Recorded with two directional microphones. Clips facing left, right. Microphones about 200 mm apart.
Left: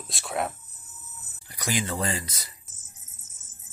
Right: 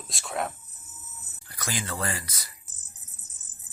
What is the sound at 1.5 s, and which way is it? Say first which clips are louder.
Speech: left 4 dB; 20° left (ahead or behind).